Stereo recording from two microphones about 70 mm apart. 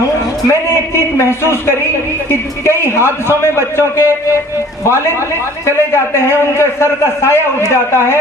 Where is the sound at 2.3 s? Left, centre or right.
Left.